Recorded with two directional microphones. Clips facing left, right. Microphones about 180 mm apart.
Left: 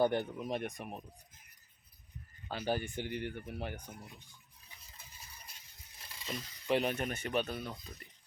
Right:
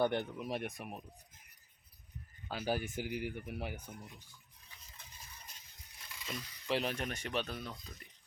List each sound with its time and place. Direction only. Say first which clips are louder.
0.0 s speech: left 2 dB; 5° left (ahead or behind)
2.5 s speech: left 1 dB; 5° right (ahead or behind)
6.1 s a sound: left 2 dB; 25° left (ahead or behind)
6.7 s speech: left 4 dB; 5° left (ahead or behind)